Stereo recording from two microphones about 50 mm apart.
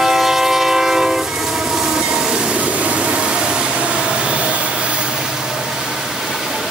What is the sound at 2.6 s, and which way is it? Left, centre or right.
Vehicle, right.